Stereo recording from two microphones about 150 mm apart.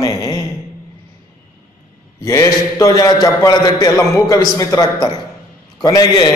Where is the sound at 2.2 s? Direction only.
20° left (ahead or behind).